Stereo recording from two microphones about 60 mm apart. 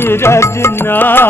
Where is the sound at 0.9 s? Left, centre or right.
Left.